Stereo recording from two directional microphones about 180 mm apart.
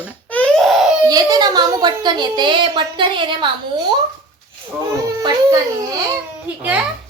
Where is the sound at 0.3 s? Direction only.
5° left (ahead or behind).